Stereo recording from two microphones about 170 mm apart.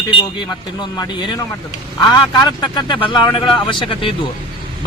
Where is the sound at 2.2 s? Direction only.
25° left (ahead or behind).